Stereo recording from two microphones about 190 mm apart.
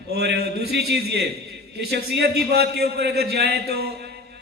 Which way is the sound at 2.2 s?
60° right (ahead or behind).